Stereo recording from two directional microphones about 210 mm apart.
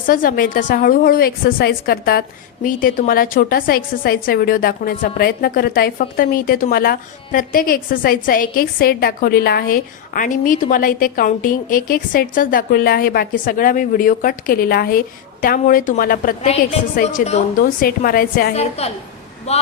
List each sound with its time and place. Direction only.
0.0 s a woman's voice: 40° left (ahead or behind)
18.5 s a woman's voice: 30° left (ahead or behind)